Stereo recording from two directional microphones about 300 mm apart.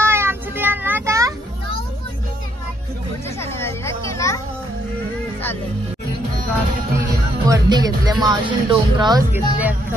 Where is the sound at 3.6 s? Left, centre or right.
Centre.